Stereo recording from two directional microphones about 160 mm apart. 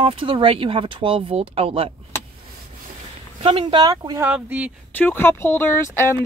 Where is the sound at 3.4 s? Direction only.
30° right (ahead or behind).